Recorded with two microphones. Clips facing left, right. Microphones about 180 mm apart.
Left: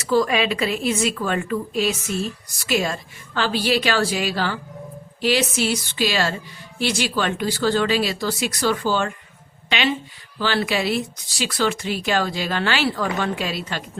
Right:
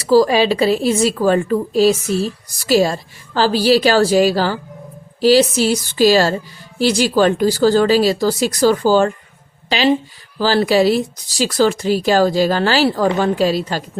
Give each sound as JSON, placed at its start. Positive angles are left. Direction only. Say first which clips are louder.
{"t": 0.0, "sound": "a woman's voice", "louder": "right 7 dB", "side_deg": -35}